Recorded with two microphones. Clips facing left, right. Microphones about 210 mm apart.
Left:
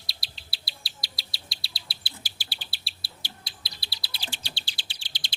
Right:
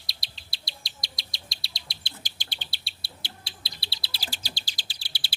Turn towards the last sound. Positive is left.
turn(degrees=-10)  # may be behind; listen again after turning